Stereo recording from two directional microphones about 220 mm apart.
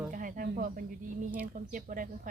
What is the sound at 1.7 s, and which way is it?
Speech, 40° right (ahead or behind).